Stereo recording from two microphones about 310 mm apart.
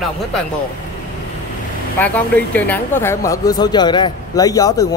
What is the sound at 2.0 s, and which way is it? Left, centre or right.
Speech, centre.